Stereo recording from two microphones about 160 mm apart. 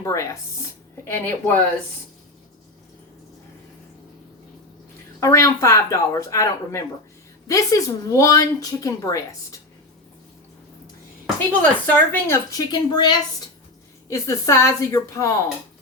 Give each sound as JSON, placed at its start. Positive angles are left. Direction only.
{"t": 0.0, "sound": "speech", "side_deg": 20}
{"t": 5.2, "sound": "a woman's voice", "side_deg": 15}
{"t": 11.6, "sound": "a woman's voice", "side_deg": 10}